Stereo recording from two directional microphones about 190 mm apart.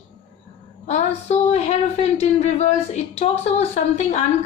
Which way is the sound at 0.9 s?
35° left (ahead or behind).